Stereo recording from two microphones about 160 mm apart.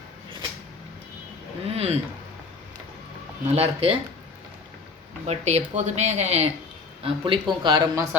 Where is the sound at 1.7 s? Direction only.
40° right (ahead or behind).